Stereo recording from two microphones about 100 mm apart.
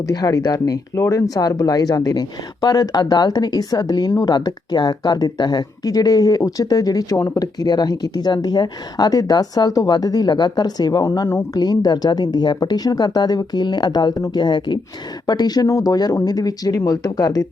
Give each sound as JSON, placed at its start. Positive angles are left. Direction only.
{"t": 0.1, "sound": "speech", "side_deg": 40}